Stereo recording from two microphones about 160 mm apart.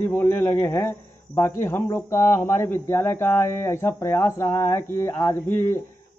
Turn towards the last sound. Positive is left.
turn(degrees=15)  # may be behind; listen again after turning